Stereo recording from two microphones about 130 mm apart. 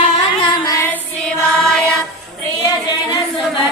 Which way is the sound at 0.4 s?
30° left (ahead or behind).